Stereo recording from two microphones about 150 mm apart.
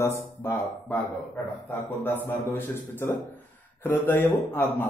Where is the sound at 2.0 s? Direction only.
15° left (ahead or behind).